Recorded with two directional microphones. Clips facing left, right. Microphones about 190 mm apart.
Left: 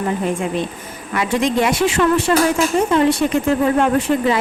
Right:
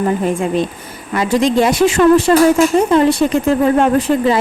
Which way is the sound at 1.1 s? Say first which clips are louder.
Right 4 dB; 35° right (ahead or behind).